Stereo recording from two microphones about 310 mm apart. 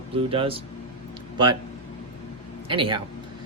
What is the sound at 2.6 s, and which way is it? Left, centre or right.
Speech, centre.